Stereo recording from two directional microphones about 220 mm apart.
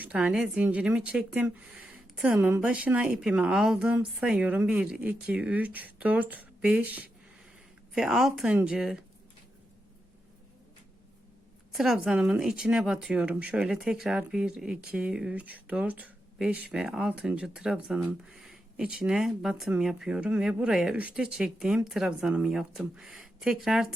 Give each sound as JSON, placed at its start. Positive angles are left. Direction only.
{"t": 0.0, "sound": "speech", "side_deg": -5}
{"t": 11.7, "sound": "speech", "side_deg": 0}